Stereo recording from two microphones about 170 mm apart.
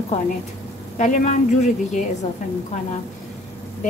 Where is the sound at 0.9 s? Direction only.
45° left (ahead or behind).